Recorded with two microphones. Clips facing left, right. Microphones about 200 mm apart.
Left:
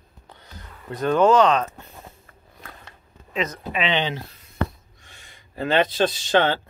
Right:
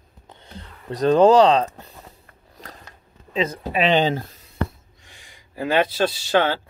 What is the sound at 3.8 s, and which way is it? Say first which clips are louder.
Speech: right 6 dB; 45° right (ahead or behind).